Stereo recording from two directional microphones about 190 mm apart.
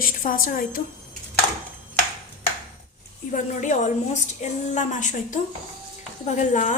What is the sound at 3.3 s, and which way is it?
A woman's voice, 40° left (ahead or behind).